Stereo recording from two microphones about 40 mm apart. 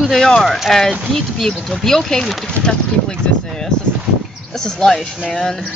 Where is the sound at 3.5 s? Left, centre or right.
Centre.